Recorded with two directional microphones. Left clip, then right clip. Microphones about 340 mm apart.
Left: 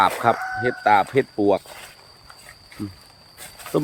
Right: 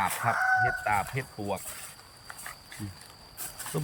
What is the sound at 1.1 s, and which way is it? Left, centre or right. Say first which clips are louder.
Speech: left 16 dB; centre.